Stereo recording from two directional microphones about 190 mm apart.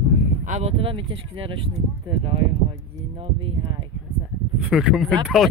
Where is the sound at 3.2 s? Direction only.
25° right (ahead or behind).